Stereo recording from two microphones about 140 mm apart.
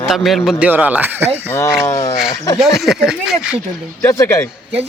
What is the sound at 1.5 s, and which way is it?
Speech, 20° left (ahead or behind).